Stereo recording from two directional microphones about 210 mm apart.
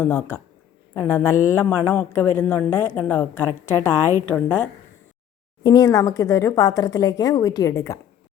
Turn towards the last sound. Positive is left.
turn(degrees=15)  # may be behind; listen again after turning